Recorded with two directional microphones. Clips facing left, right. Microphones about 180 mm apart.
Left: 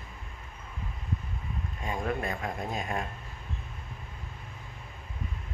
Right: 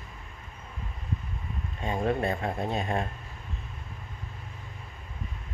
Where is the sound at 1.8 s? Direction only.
30° right (ahead or behind).